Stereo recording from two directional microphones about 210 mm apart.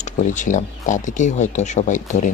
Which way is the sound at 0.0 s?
35° left (ahead or behind).